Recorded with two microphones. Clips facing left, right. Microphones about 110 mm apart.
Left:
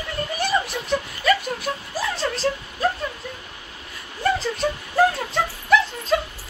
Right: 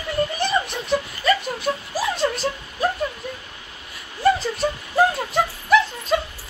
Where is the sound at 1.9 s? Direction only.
10° right (ahead or behind).